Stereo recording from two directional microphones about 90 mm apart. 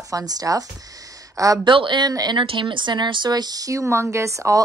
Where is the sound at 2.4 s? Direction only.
65° right (ahead or behind).